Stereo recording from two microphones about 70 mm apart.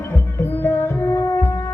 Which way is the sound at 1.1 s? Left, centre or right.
Left.